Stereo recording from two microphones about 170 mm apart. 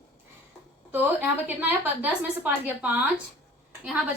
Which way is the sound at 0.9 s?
10° right (ahead or behind).